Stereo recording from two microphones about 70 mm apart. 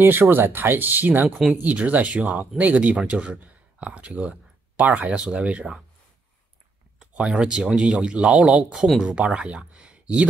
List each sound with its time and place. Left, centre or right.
0.0 s speech: right
7.0 s speech: centre
8.7 s speech: centre
9.0 s speech: centre